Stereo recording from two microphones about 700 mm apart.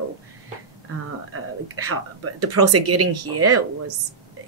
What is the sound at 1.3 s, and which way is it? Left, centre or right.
A woman's voice, centre.